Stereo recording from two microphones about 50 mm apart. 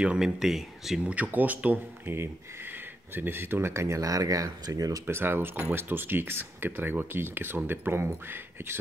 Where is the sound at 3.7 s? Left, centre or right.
Right.